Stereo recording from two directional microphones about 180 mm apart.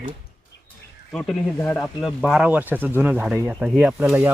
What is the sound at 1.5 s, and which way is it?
Speech, 15° left (ahead or behind).